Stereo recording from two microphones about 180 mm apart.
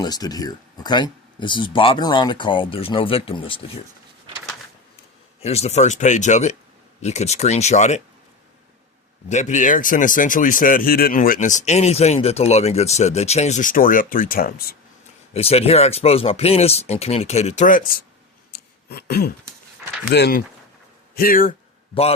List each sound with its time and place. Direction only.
0.0 s speech: 20° left (ahead or behind)
5.4 s speech: 35° left (ahead or behind)
9.3 s speech: 40° left (ahead or behind)
15.3 s speech: 35° left (ahead or behind); by 18.0 s 50° left (ahead or behind)
18.5 s a sound: 60° left (ahead or behind)
20.1 s speech: 65° left (ahead or behind)
21.2 s speech: 50° left (ahead or behind)